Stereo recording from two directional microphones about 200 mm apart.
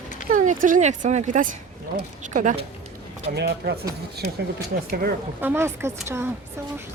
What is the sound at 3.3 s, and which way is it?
Speech, 55° right (ahead or behind).